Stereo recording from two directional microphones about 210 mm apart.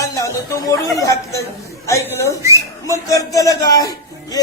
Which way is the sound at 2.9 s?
15° left (ahead or behind).